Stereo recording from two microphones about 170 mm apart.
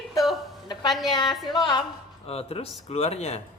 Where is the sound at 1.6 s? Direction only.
25° left (ahead or behind).